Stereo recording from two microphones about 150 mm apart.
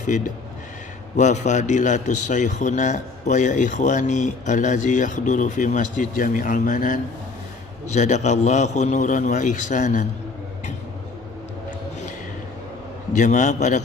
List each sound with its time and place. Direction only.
1.1 s a man's voice: 50° left (ahead or behind)
13.1 s a man's voice: 55° left (ahead or behind)